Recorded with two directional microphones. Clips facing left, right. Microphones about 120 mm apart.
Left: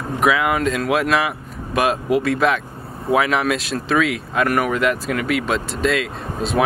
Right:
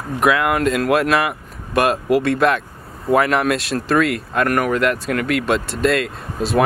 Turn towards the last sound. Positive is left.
turn(degrees=0)  # may be behind; listen again after turning